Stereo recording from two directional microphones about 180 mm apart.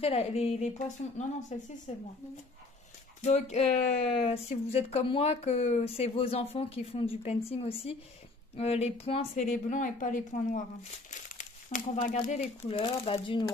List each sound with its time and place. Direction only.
0.0 s speech: 35° left (ahead or behind)
3.2 s speech: 40° left (ahead or behind)
12.7 s speech: 30° left (ahead or behind)